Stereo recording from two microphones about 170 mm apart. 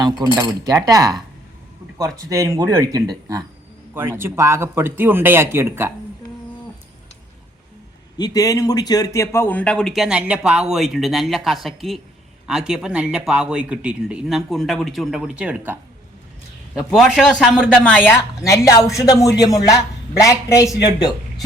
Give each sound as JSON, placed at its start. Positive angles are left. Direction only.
{"t": 0.3, "sound": "speech", "side_deg": -25}
{"t": 8.2, "sound": "a man's voice", "side_deg": 20}